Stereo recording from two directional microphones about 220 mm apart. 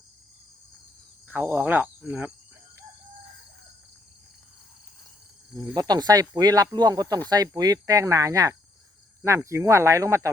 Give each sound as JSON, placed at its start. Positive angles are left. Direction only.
{"t": 1.3, "sound": "speech", "side_deg": -10}
{"t": 5.5, "sound": "speech", "side_deg": -15}